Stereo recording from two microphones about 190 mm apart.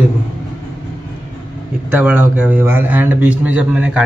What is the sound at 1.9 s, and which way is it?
A man's voice, 10° right (ahead or behind).